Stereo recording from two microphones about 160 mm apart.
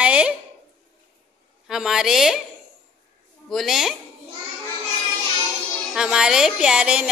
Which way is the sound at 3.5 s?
Centre (ahead or behind).